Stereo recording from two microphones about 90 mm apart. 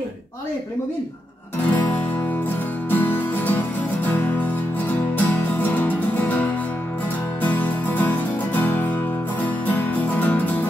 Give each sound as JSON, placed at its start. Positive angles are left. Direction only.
{"t": 1.7, "sound": "music", "side_deg": 20}